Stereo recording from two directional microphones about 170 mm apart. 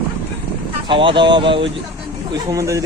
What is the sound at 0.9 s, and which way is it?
Speech, 30° right (ahead or behind).